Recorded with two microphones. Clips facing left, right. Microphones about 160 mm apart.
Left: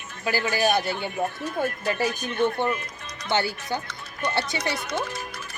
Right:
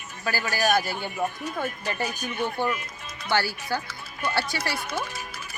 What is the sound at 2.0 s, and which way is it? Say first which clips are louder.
Speech: left 5 dB; 10° right (ahead or behind).